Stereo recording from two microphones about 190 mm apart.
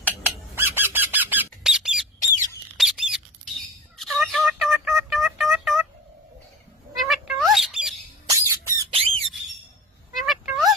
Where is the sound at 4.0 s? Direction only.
Centre (ahead or behind).